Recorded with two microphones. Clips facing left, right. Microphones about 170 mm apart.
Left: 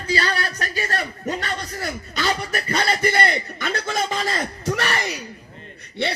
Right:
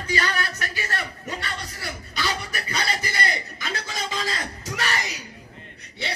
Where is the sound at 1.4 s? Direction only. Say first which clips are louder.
Left 6 dB; 50° left (ahead or behind).